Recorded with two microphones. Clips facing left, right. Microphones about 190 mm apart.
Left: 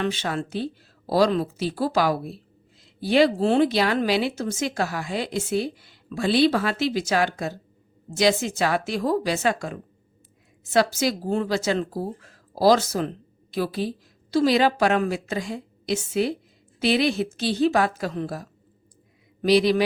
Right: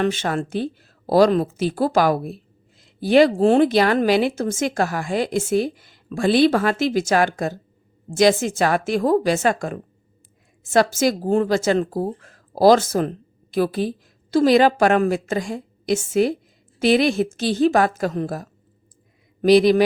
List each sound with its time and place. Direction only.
0.0 s speech: 50° right (ahead or behind)